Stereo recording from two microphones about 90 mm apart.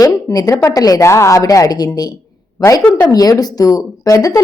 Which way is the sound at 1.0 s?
30° left (ahead or behind).